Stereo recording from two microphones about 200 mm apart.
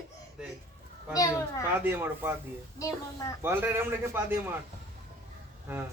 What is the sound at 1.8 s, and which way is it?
Speech, 10° right (ahead or behind).